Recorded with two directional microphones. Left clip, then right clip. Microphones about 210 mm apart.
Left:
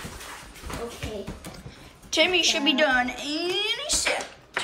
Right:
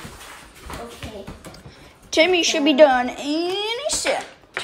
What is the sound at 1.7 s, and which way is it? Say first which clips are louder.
A woman's voice: right 2 dB; 30° right (ahead or behind).